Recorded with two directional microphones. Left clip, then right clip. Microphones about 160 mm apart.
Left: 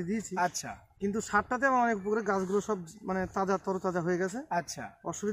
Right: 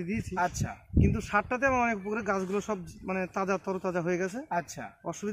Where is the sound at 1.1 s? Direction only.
20° right (ahead or behind).